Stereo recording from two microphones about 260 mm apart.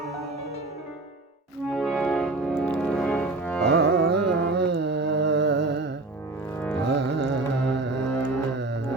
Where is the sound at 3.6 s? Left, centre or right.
Right.